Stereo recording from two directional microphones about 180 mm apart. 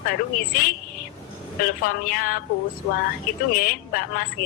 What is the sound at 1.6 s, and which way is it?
Speech, 50° left (ahead or behind).